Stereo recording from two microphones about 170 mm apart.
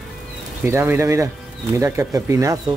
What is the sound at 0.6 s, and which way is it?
Speech, 15° right (ahead or behind).